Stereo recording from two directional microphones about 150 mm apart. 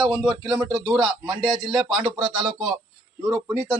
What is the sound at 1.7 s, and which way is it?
Speech, centre (ahead or behind).